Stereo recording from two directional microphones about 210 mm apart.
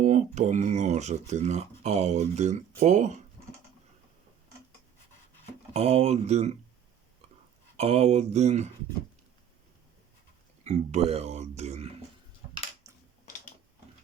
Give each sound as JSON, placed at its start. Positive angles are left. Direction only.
{"t": 0.0, "sound": "speech", "side_deg": -35}
{"t": 5.7, "sound": "speech", "side_deg": -30}
{"t": 7.8, "sound": "speech", "side_deg": -30}
{"t": 10.6, "sound": "speech", "side_deg": -30}
{"t": 13.2, "sound": "a sound", "side_deg": 40}